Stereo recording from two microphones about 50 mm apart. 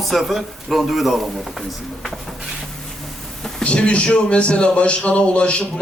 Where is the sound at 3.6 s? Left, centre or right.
Left.